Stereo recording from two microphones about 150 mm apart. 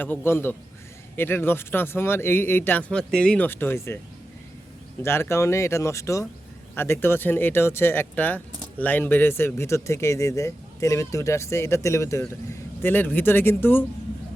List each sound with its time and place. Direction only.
0.0 s speech: 15° left (ahead or behind)
5.0 s a man's voice: 15° left (ahead or behind)